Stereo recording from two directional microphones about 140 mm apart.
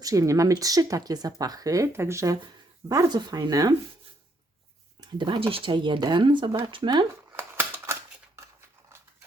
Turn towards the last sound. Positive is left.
turn(degrees=-15)  # may be behind; listen again after turning